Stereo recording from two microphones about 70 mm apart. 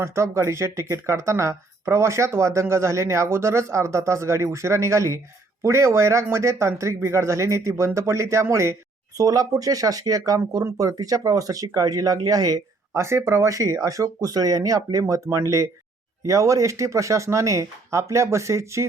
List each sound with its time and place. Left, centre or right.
0.0 s speech: right
9.1 s speech: right
13.0 s speech: right
15.0 s speech: right